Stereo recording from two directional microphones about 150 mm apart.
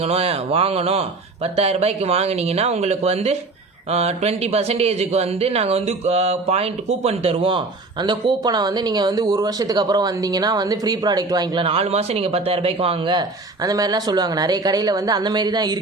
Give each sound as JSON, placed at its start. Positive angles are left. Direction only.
{"t": 0.1, "sound": "speech", "side_deg": -40}
{"t": 8.0, "sound": "speech", "side_deg": -30}
{"t": 13.7, "sound": "speech", "side_deg": -25}